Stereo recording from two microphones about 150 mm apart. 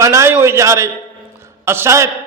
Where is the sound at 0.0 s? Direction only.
20° right (ahead or behind).